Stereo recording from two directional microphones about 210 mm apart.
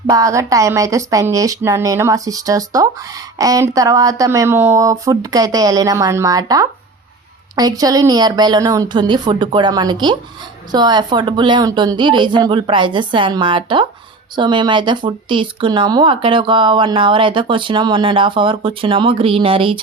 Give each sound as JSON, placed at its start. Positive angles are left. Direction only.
{"t": 0.1, "sound": "speech", "side_deg": -15}